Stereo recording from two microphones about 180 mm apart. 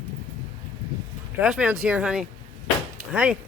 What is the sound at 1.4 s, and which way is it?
Speech, 5° right (ahead or behind).